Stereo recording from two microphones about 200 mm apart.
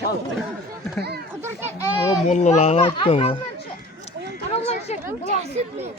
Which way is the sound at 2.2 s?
35° left (ahead or behind).